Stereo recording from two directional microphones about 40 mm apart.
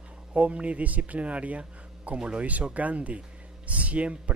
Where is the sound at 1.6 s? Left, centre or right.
Right.